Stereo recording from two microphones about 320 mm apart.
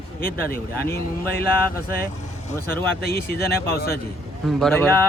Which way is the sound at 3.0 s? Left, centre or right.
Left.